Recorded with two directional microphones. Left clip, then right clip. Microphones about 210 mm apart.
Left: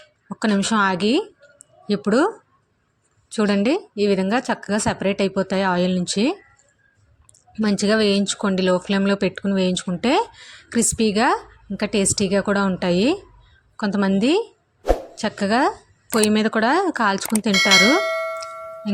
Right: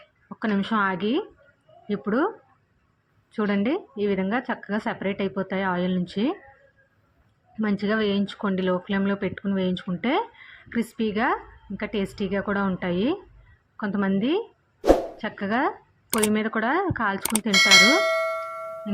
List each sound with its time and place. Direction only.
0.3 s speech: 40° left (ahead or behind)
3.3 s speech: 40° left (ahead or behind)
7.6 s speech: 40° left (ahead or behind)
17.5 s a sound: centre (ahead or behind)